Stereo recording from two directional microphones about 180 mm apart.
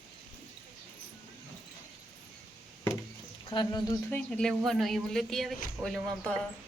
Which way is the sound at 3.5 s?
25° left (ahead or behind).